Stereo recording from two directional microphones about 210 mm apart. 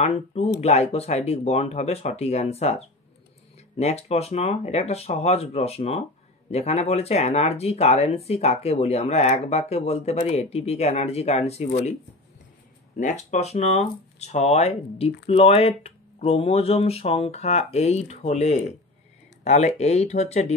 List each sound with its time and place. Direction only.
0.0 s speech: 30° left (ahead or behind)
12.9 s speech: 35° left (ahead or behind)